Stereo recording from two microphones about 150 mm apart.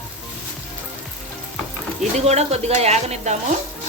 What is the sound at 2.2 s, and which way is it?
Speech, 45° right (ahead or behind).